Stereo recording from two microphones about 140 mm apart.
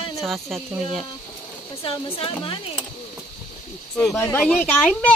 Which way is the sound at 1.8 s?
40° left (ahead or behind).